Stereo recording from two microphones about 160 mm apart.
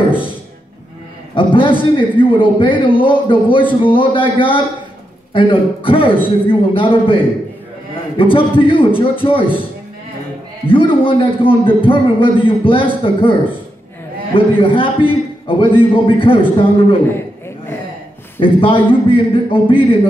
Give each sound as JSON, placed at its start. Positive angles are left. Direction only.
{"t": 1.3, "sound": "a man's voice", "side_deg": 30}
{"t": 10.7, "sound": "a man's voice", "side_deg": 35}
{"t": 18.4, "sound": "a man's voice", "side_deg": 35}